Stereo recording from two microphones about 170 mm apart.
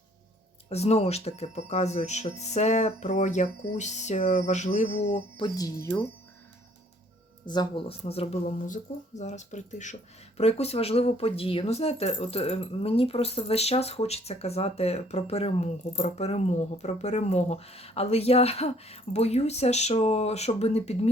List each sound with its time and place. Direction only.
0.7 s speech: 40° left (ahead or behind)
5.5 s speech: 20° left (ahead or behind)
7.4 s speech: 25° left (ahead or behind)